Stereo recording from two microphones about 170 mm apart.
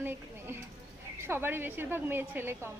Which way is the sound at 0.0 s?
15° right (ahead or behind).